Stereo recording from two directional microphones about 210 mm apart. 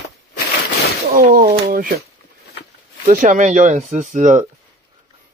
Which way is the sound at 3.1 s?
35° right (ahead or behind).